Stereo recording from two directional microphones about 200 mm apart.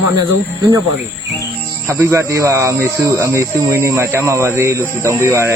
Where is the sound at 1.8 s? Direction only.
15° right (ahead or behind).